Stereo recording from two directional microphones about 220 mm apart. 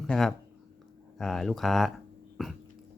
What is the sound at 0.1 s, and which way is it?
Speech, centre (ahead or behind).